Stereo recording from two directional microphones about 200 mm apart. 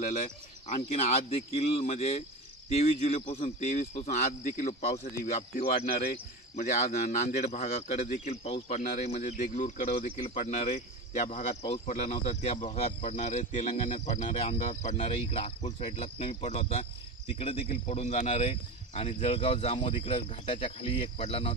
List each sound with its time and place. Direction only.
0.0 s speech: 35° left (ahead or behind)